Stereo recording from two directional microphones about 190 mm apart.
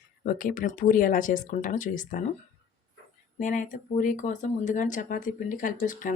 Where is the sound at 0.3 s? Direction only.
50° left (ahead or behind).